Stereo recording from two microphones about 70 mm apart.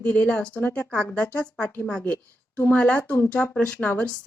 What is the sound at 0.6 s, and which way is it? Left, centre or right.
Speech, left.